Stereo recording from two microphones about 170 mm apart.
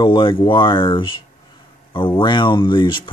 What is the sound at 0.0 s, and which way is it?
Speech, 25° left (ahead or behind).